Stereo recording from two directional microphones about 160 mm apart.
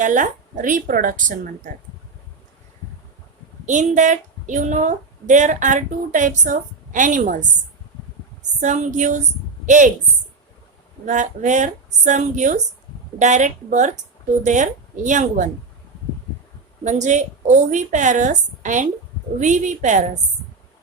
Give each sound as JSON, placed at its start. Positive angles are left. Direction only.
{"t": 0.0, "sound": "speech", "side_deg": -50}
{"t": 3.7, "sound": "a woman's voice", "side_deg": -50}
{"t": 8.6, "sound": "a woman's voice", "side_deg": -50}
{"t": 11.0, "sound": "a woman's voice", "side_deg": -50}
{"t": 16.8, "sound": "a woman's voice", "side_deg": -45}